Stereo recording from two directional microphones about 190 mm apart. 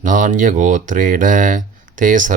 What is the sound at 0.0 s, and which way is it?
Speech, 45° right (ahead or behind).